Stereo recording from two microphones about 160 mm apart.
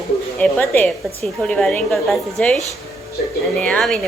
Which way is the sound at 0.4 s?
10° left (ahead or behind).